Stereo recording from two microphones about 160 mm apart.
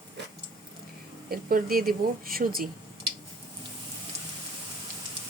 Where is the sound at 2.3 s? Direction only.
65° right (ahead or behind).